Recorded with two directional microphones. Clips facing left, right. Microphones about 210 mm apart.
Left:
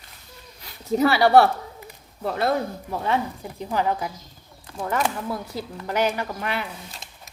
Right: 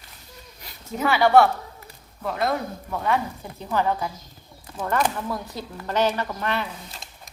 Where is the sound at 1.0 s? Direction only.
35° left (ahead or behind).